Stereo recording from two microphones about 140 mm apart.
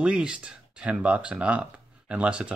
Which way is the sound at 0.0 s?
5° right (ahead or behind).